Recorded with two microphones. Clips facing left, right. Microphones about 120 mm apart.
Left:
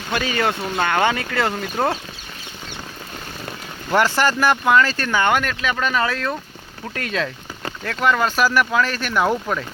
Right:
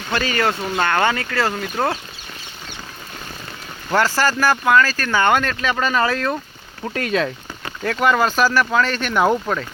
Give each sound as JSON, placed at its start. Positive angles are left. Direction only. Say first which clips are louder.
{"t": 0.1, "sound": "speech", "louder": "right 1 dB", "side_deg": 15}
{"t": 1.5, "sound": "speech", "louder": "even", "side_deg": 5}
{"t": 3.9, "sound": "speech", "louder": "even", "side_deg": 15}
{"t": 5.1, "sound": "speech", "louder": "right 2 dB", "side_deg": 5}
{"t": 8.4, "sound": "speech", "louder": "right 1 dB", "side_deg": 10}